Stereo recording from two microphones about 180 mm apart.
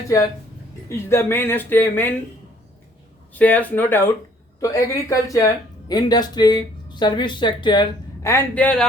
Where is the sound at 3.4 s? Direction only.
10° left (ahead or behind).